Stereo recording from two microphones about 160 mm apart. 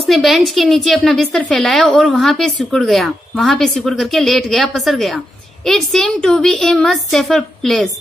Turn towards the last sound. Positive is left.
turn(degrees=0)  # may be behind; listen again after turning